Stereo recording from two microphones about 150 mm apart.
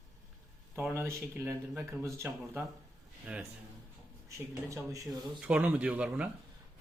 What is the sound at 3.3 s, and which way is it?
Speech, 10° right (ahead or behind).